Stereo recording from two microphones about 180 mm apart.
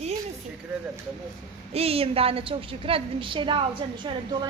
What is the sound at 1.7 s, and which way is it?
A woman's voice, 35° right (ahead or behind).